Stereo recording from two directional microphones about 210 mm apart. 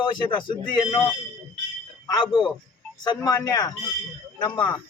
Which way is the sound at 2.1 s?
20° left (ahead or behind).